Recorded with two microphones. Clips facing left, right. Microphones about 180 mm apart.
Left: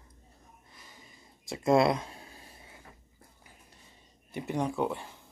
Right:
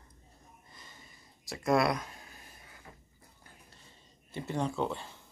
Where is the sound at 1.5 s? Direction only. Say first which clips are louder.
Left 4 dB; 25° left (ahead or behind).